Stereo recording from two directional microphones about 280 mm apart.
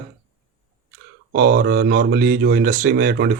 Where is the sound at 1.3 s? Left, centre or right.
Right.